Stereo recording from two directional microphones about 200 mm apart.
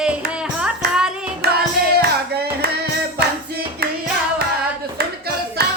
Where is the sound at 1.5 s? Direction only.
50° right (ahead or behind).